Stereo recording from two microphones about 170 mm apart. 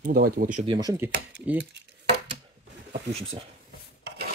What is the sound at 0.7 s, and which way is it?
Speech, 20° right (ahead or behind).